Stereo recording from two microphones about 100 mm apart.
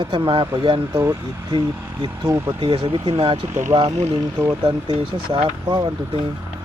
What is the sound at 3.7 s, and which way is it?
Speech, 80° right.